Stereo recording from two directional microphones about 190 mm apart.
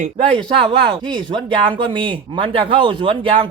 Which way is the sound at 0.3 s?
25° right (ahead or behind).